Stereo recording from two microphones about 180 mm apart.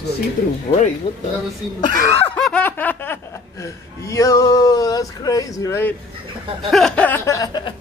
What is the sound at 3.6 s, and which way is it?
Speech, 15° left (ahead or behind).